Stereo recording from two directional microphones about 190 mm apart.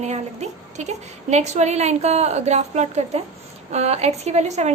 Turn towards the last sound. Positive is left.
turn(degrees=-35)  # may be behind; listen again after turning